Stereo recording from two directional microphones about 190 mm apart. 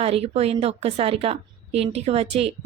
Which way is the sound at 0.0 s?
30° right (ahead or behind).